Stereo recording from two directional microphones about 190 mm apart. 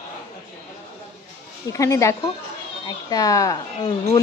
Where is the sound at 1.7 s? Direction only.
15° left (ahead or behind).